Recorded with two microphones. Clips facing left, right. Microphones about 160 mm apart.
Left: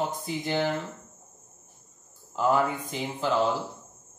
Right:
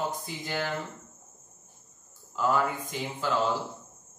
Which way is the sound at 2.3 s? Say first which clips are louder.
Left 2 dB; 20° left (ahead or behind).